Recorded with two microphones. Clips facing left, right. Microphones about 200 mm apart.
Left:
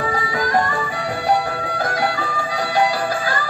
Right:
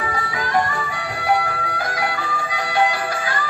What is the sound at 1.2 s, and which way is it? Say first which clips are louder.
Music: even; 30° left (ahead or behind).